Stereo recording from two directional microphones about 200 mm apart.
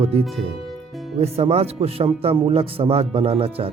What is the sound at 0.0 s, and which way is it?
A man's voice, 30° right (ahead or behind).